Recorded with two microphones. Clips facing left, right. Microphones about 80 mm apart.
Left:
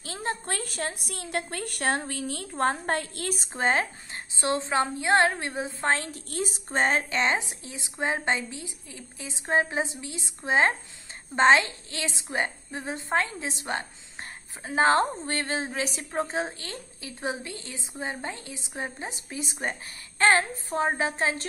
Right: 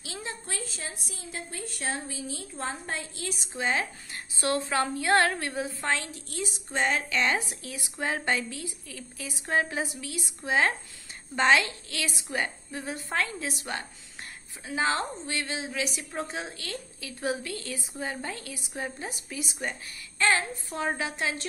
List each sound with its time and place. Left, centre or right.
0.0 s a woman's voice: left
4.1 s a woman's voice: left
14.6 s a woman's voice: left